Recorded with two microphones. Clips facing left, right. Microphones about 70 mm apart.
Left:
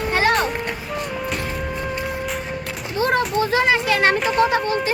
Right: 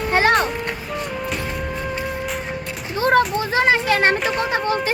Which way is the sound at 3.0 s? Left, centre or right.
Right.